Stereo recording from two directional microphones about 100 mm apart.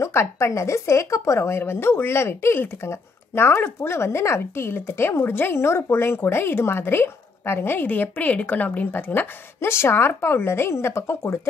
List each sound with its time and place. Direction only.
0.0 s speech: 25° left (ahead or behind)